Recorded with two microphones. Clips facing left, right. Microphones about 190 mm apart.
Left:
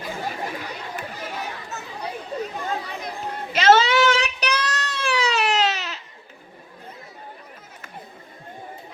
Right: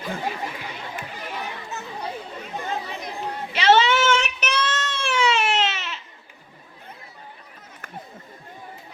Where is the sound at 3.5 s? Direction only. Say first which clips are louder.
Left 2 dB; 40° left (ahead or behind).